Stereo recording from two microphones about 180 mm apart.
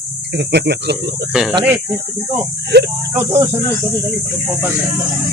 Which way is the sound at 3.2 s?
15° right (ahead or behind).